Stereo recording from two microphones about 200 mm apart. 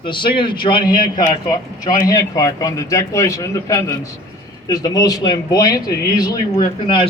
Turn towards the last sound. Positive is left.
turn(degrees=20)  # may be behind; listen again after turning